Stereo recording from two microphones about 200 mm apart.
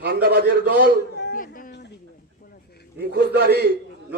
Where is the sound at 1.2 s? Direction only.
50° left (ahead or behind).